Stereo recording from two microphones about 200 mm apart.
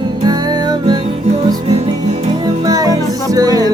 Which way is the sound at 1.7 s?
30° right (ahead or behind).